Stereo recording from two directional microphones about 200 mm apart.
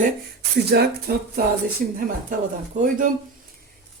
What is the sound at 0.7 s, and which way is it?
Speech, 50° right (ahead or behind).